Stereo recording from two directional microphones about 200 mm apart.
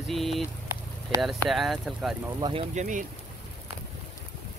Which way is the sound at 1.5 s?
Centre (ahead or behind).